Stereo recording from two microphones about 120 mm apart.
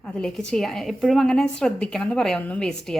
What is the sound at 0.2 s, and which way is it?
A woman's voice, 5° left (ahead or behind).